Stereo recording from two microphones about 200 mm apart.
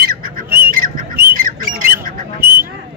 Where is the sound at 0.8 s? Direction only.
45° right (ahead or behind).